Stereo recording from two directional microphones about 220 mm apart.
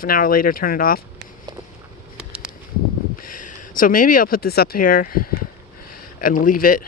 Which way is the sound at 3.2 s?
35° left (ahead or behind).